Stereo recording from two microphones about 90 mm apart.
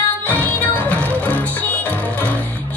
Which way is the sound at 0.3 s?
15° left (ahead or behind).